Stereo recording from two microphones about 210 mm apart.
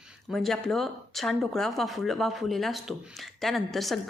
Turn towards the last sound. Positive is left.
turn(degrees=0)  # may be behind; listen again after turning